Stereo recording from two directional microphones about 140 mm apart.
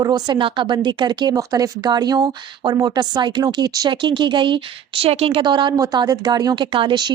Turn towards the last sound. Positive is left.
turn(degrees=-35)  # may be behind; listen again after turning